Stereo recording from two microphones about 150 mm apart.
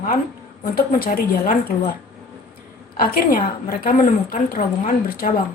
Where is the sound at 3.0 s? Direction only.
80° left.